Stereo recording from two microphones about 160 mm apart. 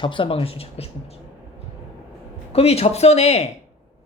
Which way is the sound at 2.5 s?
40° left (ahead or behind).